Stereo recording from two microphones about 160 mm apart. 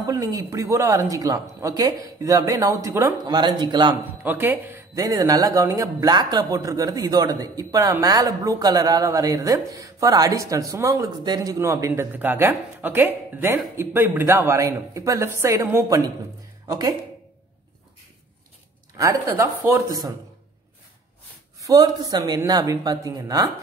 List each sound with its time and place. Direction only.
0.0 s speech: 25° right (ahead or behind)
4.2 s speech: 15° right (ahead or behind)
18.9 s speech: 20° right (ahead or behind)
21.5 s speech: 20° right (ahead or behind)